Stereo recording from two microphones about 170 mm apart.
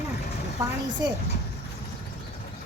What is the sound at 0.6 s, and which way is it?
Speech, 15° right (ahead or behind).